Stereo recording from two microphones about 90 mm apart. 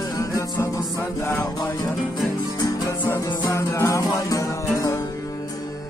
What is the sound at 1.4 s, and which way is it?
Music, 45° left (ahead or behind).